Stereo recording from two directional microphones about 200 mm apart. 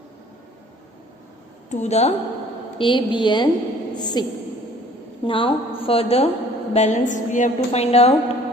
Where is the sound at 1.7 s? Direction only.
35° left (ahead or behind).